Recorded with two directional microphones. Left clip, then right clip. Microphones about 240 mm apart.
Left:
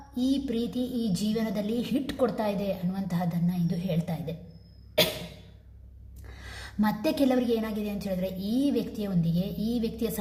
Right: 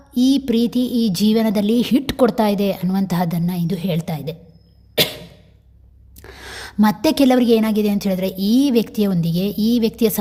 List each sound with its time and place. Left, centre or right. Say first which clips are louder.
0.1 s speech: right 12 dB; right
6.2 s speech: right 11 dB; right